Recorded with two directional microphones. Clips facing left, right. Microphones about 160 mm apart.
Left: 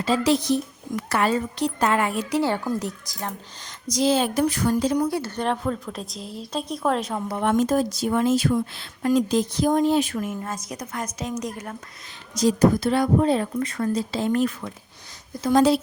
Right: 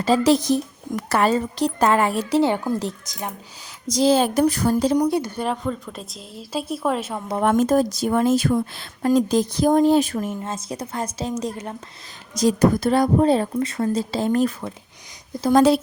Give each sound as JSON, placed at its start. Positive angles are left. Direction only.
{"t": 0.0, "sound": "speech", "side_deg": -40}
{"t": 2.4, "sound": "speech", "side_deg": -15}
{"t": 2.7, "sound": "speech", "side_deg": -30}
{"t": 4.9, "sound": "a woman's voice", "side_deg": -20}
{"t": 7.3, "sound": "speech", "side_deg": -45}
{"t": 10.4, "sound": "speech", "side_deg": -25}
{"t": 12.5, "sound": "speech", "side_deg": -50}
{"t": 15.5, "sound": "speech", "side_deg": -55}